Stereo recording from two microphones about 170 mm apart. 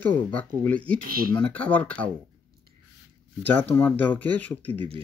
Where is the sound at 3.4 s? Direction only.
10° left (ahead or behind).